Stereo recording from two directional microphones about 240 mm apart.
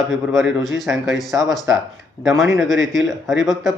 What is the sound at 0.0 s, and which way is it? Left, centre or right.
Speech, centre.